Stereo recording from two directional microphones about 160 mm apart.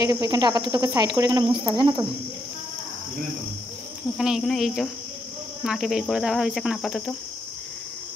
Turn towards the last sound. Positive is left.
turn(degrees=0)  # may be behind; listen again after turning